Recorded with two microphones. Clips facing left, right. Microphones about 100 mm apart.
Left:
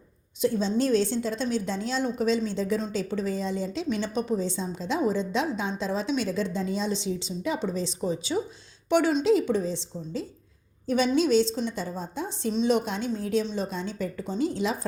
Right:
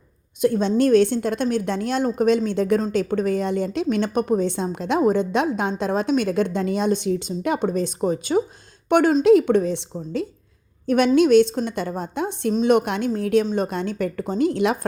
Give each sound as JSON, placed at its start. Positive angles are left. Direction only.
{"t": 0.4, "sound": "a woman's voice", "side_deg": -55}